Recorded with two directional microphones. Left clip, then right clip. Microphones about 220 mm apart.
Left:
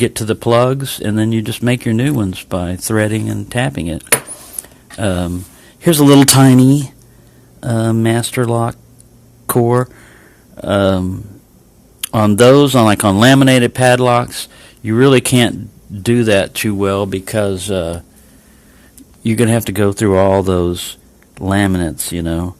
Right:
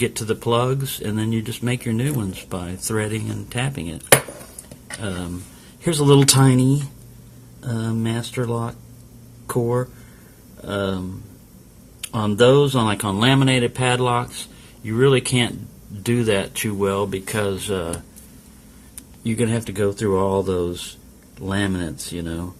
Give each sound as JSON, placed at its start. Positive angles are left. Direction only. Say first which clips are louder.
{"t": 0.0, "sound": "speech", "louder": "left 7 dB", "side_deg": 40}
{"t": 19.2, "sound": "speech", "louder": "left 9 dB", "side_deg": 45}